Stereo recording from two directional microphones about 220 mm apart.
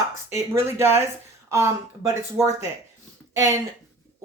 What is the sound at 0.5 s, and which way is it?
Speech, 10° right (ahead or behind).